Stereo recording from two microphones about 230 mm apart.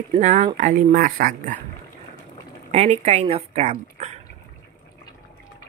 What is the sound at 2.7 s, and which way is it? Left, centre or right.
Speech, right.